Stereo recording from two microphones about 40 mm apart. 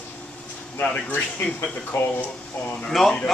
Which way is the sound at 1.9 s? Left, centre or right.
Left.